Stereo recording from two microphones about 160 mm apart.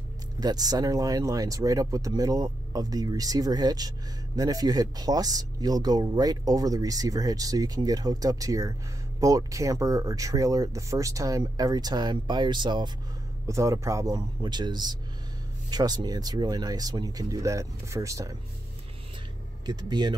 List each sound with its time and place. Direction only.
0.4 s speech: 25° right (ahead or behind)
19.6 s speech: 25° right (ahead or behind)